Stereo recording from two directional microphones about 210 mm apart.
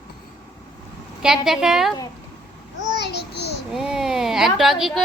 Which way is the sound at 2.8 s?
55° left (ahead or behind).